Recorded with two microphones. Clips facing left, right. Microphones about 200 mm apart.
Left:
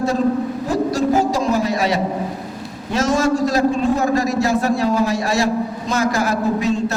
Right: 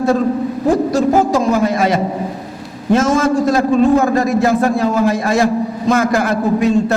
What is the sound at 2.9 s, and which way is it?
A man's voice, 50° right (ahead or behind).